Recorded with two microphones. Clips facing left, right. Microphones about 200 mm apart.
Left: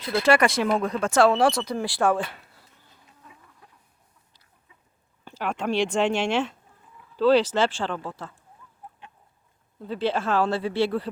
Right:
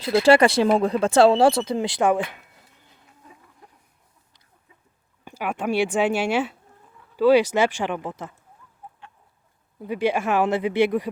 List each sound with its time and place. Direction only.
0.0 s speech: 30° right (ahead or behind)
5.2 s speech: 10° right (ahead or behind)
9.8 s speech: 15° right (ahead or behind)